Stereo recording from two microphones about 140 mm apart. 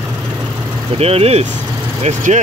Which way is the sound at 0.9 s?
45° right (ahead or behind).